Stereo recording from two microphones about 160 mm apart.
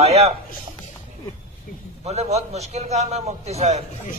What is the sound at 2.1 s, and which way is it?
A man's voice, 45° right (ahead or behind).